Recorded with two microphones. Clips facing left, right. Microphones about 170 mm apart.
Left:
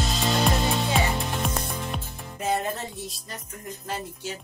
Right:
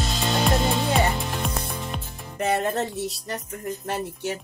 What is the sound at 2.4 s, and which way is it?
Music, 70° right (ahead or behind).